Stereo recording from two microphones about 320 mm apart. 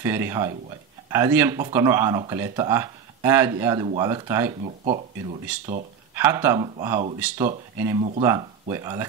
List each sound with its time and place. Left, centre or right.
0.0 s speech: centre
4.6 s speech: right
6.1 s speech: centre